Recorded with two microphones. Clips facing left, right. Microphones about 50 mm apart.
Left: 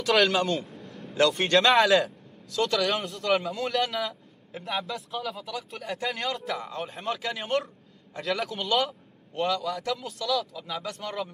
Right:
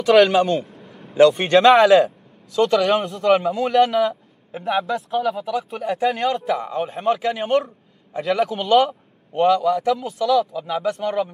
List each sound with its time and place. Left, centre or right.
0.0 s a man's voice: centre
3.2 s a man's voice: centre
3.4 s a man's voice: centre